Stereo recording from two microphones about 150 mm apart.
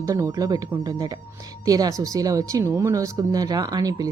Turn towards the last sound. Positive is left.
turn(degrees=-25)  # may be behind; listen again after turning